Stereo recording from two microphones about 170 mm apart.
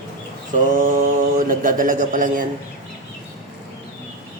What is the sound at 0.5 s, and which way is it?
Mantra, 55° right (ahead or behind).